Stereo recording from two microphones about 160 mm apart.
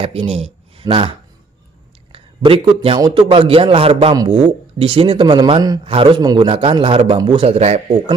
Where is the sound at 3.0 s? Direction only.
30° right (ahead or behind).